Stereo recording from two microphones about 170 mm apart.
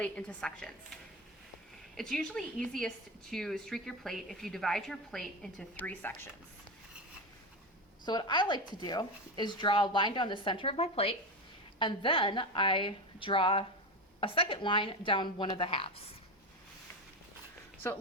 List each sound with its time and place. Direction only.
0.0 s a woman's voice: 5° left (ahead or behind)
2.0 s a woman's voice: 5° left (ahead or behind)
8.0 s a woman's voice: 25° left (ahead or behind)